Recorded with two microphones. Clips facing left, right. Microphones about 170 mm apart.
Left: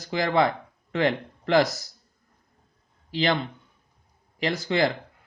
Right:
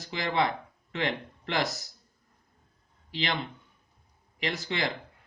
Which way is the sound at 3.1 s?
40° left (ahead or behind).